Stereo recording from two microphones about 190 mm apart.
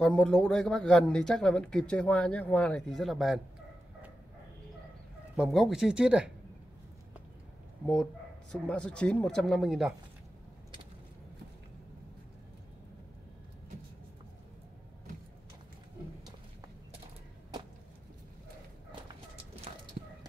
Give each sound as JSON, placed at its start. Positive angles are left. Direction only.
{"t": 0.0, "sound": "speech", "side_deg": 5}
{"t": 5.3, "sound": "speech", "side_deg": 0}
{"t": 7.8, "sound": "speech", "side_deg": 0}
{"t": 20.0, "sound": "a sound", "side_deg": -45}